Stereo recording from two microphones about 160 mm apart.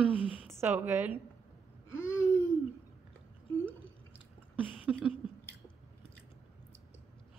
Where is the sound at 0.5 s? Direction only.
15° right (ahead or behind).